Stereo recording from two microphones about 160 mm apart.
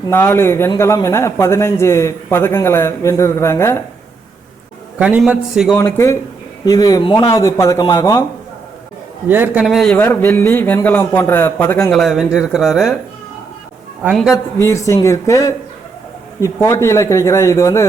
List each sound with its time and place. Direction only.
0.1 s a man's voice: 15° left (ahead or behind)
4.9 s a man's voice: 10° right (ahead or behind)
5.7 s speech: 20° left (ahead or behind)
9.3 s a man's voice: 10° right (ahead or behind)
10.0 s a man's voice: 15° left (ahead or behind)
11.9 s a man's voice: centre (ahead or behind)
14.0 s a man's voice: centre (ahead or behind)
14.6 s a man's voice: 15° left (ahead or behind)